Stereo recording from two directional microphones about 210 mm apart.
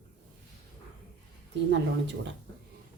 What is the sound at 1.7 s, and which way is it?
Speech, 55° right (ahead or behind).